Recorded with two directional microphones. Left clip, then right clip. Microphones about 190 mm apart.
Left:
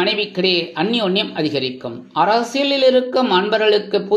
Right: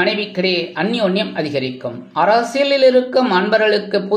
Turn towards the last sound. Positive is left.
turn(degrees=20)  # may be behind; listen again after turning